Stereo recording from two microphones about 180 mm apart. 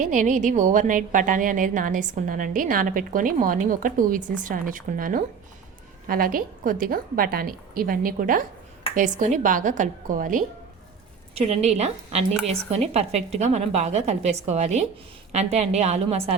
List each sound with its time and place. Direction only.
0.0 s a woman's voice: 45° right (ahead or behind)
11.3 s a woman's voice: 35° right (ahead or behind)